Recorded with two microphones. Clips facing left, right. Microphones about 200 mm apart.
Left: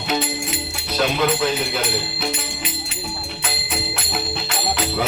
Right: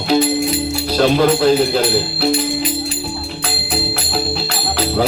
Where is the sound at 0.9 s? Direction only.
35° right (ahead or behind).